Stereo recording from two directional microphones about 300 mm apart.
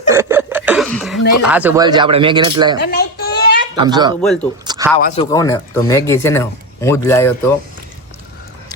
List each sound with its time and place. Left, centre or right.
0.1 s a sound: centre
1.4 s speech: centre
2.7 s a sound: left
3.8 s speech: centre
4.2 s speech: centre
4.6 s speech: centre
5.0 s speech: centre